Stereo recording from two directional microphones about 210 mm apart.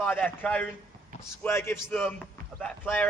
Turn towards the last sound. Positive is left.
turn(degrees=10)  # may be behind; listen again after turning